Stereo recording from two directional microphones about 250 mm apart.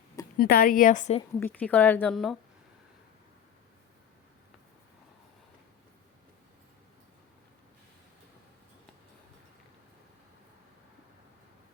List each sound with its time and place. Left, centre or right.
0.3 s a woman's voice: left
1.4 s a woman's voice: centre